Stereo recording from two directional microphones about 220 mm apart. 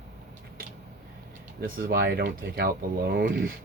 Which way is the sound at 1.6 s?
40° right (ahead or behind).